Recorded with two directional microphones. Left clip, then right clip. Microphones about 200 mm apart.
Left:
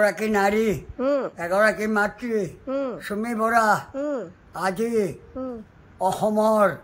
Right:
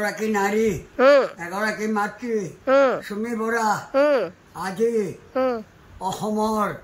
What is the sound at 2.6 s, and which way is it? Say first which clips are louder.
Speech: right 10 dB; centre (ahead or behind).